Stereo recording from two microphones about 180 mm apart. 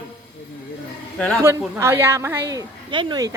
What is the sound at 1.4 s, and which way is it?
A woman's voice, 15° right (ahead or behind).